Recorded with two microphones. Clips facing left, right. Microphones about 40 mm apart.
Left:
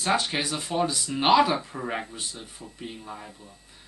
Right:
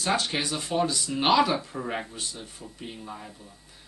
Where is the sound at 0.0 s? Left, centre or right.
Centre.